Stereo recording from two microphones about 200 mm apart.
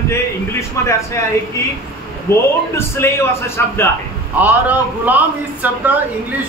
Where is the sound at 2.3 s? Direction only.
15° left (ahead or behind).